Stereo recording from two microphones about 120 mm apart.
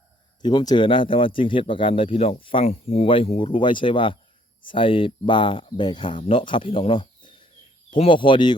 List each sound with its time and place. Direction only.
0.4 s speech: 35° left (ahead or behind)